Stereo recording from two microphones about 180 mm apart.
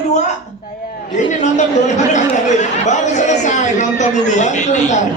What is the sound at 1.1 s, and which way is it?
A woman's voice, 40° left (ahead or behind).